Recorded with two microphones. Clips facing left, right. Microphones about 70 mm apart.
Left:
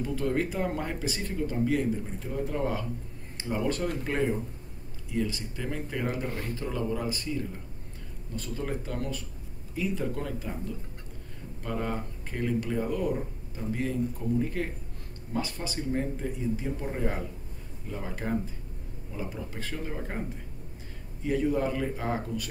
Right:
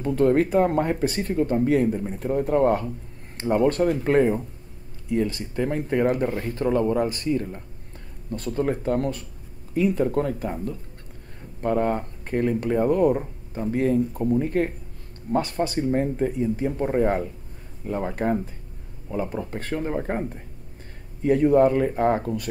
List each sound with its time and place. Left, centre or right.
0.0 s speech: right